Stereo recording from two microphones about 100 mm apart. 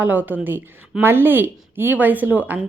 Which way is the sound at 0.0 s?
15° right (ahead or behind).